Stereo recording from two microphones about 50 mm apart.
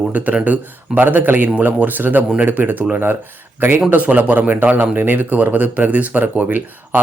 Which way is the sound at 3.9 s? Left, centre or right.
Right.